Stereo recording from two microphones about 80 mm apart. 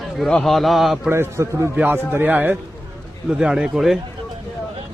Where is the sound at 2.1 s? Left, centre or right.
Right.